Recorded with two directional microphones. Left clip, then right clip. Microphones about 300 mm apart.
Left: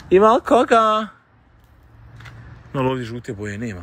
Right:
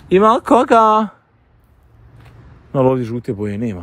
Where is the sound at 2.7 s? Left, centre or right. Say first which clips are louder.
Right 7 dB; centre.